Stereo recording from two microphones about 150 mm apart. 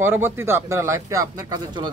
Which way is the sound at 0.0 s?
15° right (ahead or behind).